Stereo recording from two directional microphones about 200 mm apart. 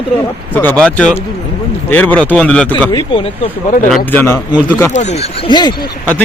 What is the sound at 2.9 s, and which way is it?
Speech, 25° left (ahead or behind).